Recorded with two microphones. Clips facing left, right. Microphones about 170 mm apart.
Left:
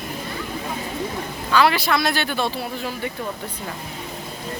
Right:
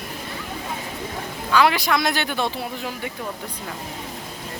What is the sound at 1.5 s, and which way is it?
Speech, 15° right (ahead or behind).